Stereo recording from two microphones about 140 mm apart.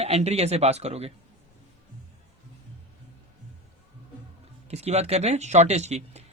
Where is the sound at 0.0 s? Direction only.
50° right (ahead or behind).